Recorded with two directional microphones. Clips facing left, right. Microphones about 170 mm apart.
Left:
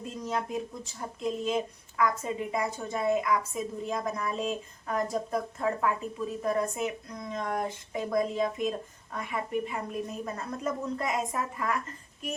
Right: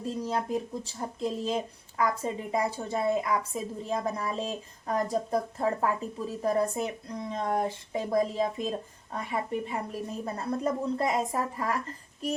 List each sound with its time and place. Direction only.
0.0 s speech: 35° right (ahead or behind)